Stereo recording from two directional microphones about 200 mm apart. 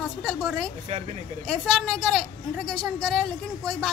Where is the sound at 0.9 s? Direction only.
35° right (ahead or behind).